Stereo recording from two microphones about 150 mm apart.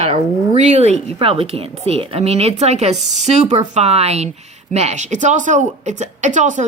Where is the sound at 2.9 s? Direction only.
Centre (ahead or behind).